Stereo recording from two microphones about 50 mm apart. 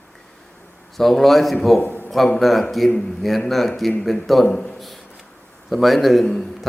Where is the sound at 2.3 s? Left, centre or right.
Centre.